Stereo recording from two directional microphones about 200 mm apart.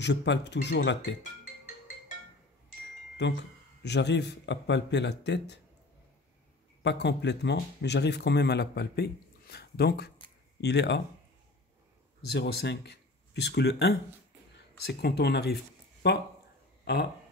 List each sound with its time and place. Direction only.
0.0 s speech: 60° left (ahead or behind)
3.2 s speech: 60° left (ahead or behind)
6.8 s speech: 60° left (ahead or behind)
12.3 s speech: 55° left (ahead or behind)